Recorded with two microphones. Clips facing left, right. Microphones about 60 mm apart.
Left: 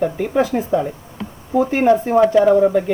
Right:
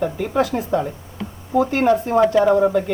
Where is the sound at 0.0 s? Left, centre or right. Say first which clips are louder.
Left 2 dB; centre.